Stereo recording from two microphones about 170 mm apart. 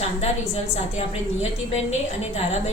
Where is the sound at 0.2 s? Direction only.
40° left (ahead or behind).